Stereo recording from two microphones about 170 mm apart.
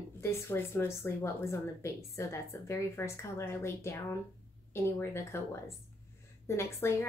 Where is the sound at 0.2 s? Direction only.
15° left (ahead or behind).